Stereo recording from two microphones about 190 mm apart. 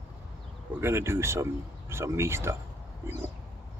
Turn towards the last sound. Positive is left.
turn(degrees=-15)  # may be behind; listen again after turning